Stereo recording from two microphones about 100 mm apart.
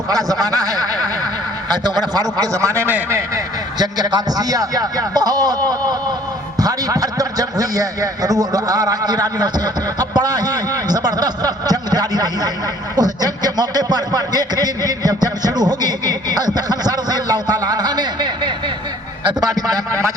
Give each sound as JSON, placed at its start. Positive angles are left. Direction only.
{"t": 0.1, "sound": "a man's voice", "side_deg": -35}
{"t": 3.8, "sound": "a man's voice", "side_deg": -40}